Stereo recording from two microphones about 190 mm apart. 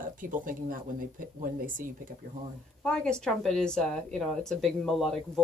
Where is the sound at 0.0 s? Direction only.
45° right (ahead or behind).